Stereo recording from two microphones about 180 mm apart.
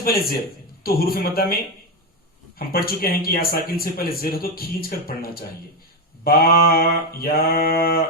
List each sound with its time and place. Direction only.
0.0 s speech: 55° left (ahead or behind)
2.6 s speech: 55° left (ahead or behind)